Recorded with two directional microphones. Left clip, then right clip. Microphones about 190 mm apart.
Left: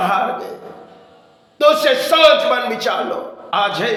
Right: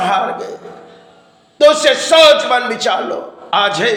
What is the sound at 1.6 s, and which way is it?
A man's voice, 15° right (ahead or behind).